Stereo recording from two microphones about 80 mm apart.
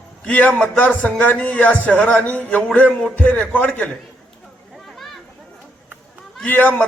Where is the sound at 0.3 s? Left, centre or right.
Centre.